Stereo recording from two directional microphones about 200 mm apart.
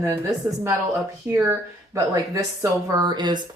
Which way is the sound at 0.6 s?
10° right (ahead or behind).